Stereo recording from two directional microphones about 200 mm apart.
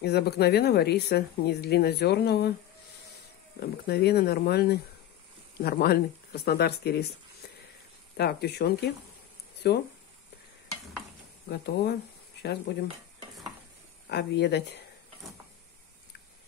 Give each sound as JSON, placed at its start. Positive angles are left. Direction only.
{"t": 0.0, "sound": "speech", "side_deg": 55}
{"t": 3.5, "sound": "speech", "side_deg": 50}
{"t": 8.2, "sound": "speech", "side_deg": 55}
{"t": 11.4, "sound": "speech", "side_deg": 55}
{"t": 14.0, "sound": "speech", "side_deg": 55}